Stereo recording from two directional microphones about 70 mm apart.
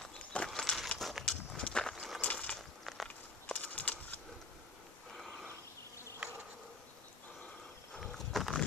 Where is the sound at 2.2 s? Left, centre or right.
Centre.